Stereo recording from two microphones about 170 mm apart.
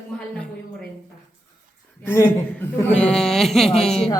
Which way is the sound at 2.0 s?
15° left (ahead or behind).